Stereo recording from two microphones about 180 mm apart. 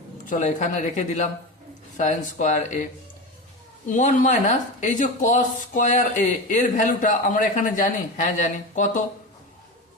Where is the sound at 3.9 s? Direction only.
45° left (ahead or behind).